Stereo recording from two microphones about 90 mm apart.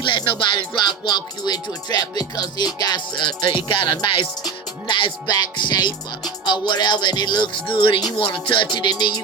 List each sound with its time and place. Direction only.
0.0 s music: 65° left (ahead or behind)
4.4 s music: 60° left (ahead or behind)